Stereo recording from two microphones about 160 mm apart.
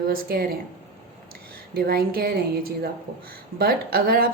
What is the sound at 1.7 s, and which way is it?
Speech, 70° right (ahead or behind).